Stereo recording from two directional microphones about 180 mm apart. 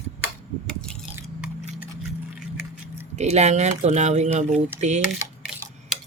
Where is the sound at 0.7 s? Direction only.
5° left (ahead or behind).